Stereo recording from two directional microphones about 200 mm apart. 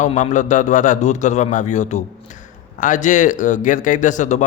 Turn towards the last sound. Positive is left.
turn(degrees=40)  # may be behind; listen again after turning